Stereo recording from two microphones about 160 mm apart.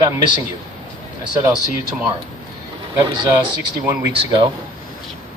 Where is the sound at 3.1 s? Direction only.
30° right (ahead or behind).